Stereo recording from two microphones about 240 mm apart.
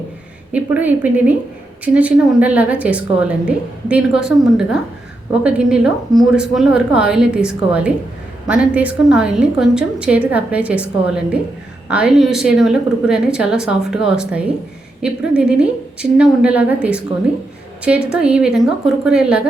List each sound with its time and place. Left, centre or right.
0.5 s a woman's voice: centre